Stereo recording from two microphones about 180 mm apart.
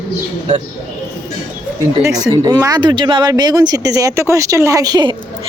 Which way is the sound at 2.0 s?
20° right (ahead or behind).